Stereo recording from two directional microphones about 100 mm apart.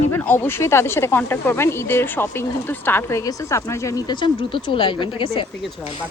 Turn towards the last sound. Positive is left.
turn(degrees=65)  # may be behind; listen again after turning